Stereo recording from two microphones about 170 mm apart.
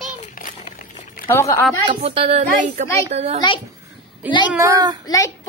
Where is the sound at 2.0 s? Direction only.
35° right (ahead or behind).